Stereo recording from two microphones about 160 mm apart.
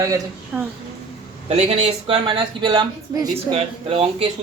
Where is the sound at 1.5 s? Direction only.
45° right (ahead or behind).